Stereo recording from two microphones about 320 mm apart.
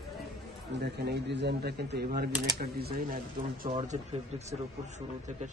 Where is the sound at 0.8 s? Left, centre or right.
Right.